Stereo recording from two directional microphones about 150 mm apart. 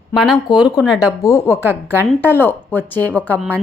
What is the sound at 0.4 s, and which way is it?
A woman's voice, 30° left (ahead or behind).